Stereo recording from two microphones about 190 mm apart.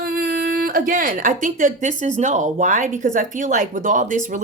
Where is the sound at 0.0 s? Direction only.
50° right (ahead or behind).